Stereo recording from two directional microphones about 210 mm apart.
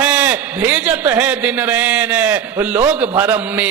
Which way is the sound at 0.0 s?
10° right (ahead or behind).